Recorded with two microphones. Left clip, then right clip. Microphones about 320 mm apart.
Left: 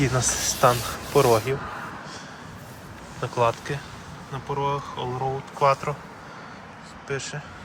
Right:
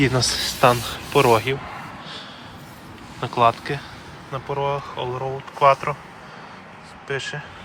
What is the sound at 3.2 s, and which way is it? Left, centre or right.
Speech, centre.